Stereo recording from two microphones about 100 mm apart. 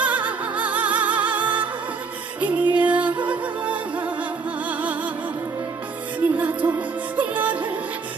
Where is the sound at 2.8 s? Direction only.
15° right (ahead or behind).